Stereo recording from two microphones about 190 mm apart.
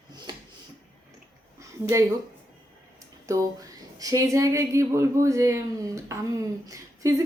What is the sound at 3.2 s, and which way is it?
Speech, 20° right (ahead or behind).